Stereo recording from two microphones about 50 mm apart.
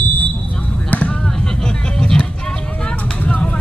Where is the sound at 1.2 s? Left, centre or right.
Centre.